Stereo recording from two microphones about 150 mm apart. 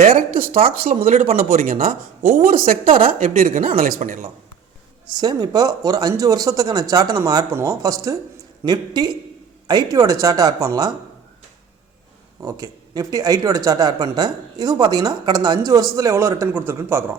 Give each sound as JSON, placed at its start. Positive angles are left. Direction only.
{"t": 0.0, "sound": "a woman's voice", "side_deg": -70}
{"t": 5.1, "sound": "speech", "side_deg": -30}
{"t": 12.4, "sound": "speech", "side_deg": -25}